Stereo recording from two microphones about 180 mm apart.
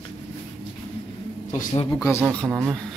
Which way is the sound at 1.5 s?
45° left (ahead or behind).